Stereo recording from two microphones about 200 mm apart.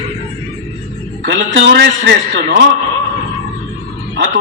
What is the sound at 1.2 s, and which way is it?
A man's voice, 65° right (ahead or behind).